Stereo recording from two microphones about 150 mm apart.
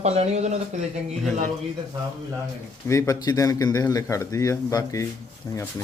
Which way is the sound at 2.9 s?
20° left (ahead or behind).